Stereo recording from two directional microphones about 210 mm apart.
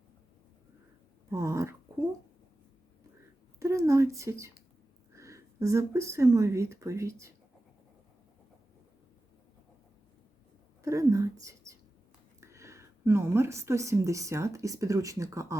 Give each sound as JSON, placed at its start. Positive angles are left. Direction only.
{"t": 1.3, "sound": "dog", "side_deg": -15}
{"t": 3.6, "sound": "speech", "side_deg": -15}
{"t": 10.8, "sound": "a woman's voice", "side_deg": -15}